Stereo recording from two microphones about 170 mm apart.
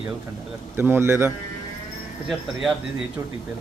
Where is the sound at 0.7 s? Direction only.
15° right (ahead or behind).